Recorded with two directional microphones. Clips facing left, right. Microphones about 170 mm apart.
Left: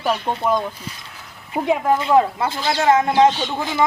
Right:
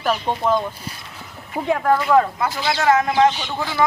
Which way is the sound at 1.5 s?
15° left (ahead or behind).